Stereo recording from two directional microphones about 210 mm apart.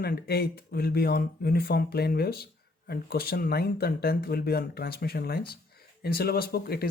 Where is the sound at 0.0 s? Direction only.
50° left (ahead or behind).